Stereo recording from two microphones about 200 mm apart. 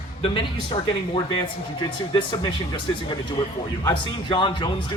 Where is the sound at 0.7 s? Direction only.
25° left (ahead or behind).